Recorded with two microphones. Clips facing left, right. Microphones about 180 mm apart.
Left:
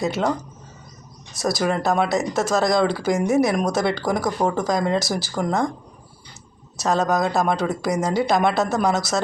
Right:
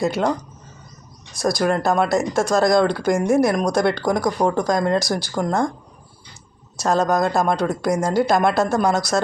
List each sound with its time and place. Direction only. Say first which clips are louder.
0.0 s speech: right 2 dB; centre (ahead or behind)
1.4 s speech: right 2 dB; centre (ahead or behind)
6.7 s speech: right 2 dB; centre (ahead or behind)